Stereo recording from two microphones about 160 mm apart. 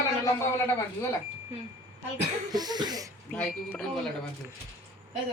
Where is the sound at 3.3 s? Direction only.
5° left (ahead or behind).